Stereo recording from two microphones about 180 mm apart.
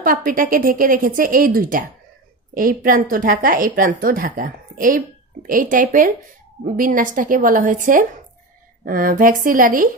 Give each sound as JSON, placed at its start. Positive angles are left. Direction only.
{"t": 0.0, "sound": "a woman's voice", "side_deg": -50}